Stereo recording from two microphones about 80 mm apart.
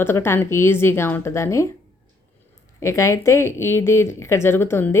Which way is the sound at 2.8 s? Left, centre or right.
Left.